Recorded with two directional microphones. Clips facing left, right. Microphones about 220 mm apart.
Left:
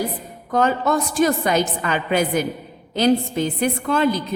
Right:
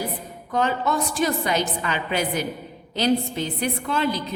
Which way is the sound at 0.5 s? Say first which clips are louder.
Left 4 dB; 45° left (ahead or behind).